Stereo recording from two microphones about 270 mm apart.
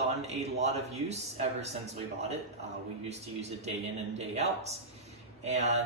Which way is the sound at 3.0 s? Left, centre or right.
Right.